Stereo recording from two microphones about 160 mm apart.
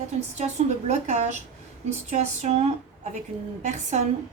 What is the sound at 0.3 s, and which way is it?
A woman's voice, 45° right (ahead or behind).